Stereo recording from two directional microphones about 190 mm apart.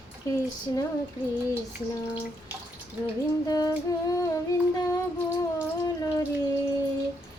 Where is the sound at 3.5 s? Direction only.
20° left (ahead or behind).